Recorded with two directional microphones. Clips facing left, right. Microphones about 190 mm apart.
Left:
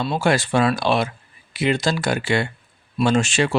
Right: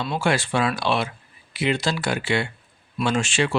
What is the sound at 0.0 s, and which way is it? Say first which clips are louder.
Speech: left 3 dB; 35° left (ahead or behind).